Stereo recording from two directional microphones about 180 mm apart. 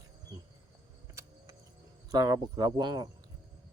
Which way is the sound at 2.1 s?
20° right (ahead or behind).